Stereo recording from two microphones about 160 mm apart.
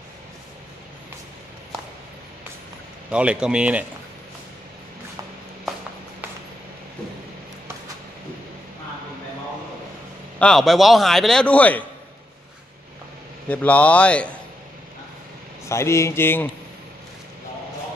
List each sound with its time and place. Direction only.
3.1 s a man's voice: 5° right (ahead or behind)
10.4 s a man's voice: centre (ahead or behind)
13.5 s speech: 10° left (ahead or behind)
15.7 s speech: 15° left (ahead or behind)